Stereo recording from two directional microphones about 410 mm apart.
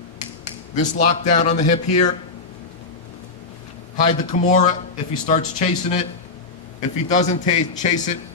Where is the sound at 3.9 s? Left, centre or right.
Centre.